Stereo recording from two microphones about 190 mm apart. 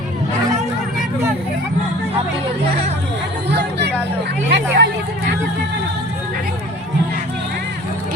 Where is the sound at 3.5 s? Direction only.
60° right (ahead or behind).